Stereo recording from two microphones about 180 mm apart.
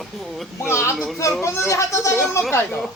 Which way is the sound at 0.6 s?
15° left (ahead or behind).